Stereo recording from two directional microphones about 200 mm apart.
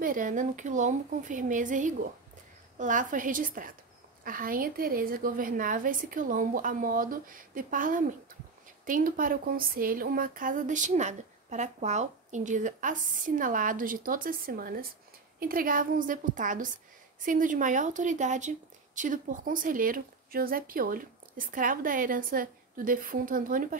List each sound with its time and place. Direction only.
0.0 s speech: 40° right (ahead or behind)